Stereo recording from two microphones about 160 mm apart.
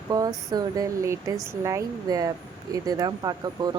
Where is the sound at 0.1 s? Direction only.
25° right (ahead or behind).